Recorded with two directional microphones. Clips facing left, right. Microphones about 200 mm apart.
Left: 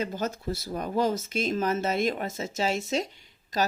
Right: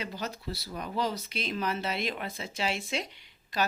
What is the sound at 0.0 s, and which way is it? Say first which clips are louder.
Speech: left 6 dB; 50° left (ahead or behind).